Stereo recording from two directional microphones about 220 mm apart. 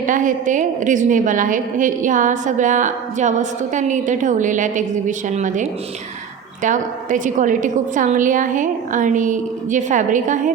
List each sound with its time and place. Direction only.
0.0 s a woman's voice: 35° right (ahead or behind)